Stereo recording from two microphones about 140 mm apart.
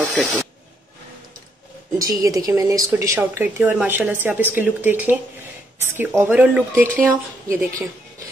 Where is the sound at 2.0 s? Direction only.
25° right (ahead or behind).